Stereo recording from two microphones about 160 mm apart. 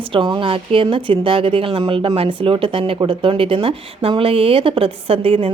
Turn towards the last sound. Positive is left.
turn(degrees=-35)  # may be behind; listen again after turning